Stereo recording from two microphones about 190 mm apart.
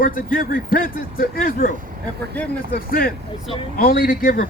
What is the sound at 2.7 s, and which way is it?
A man's voice, 50° left (ahead or behind).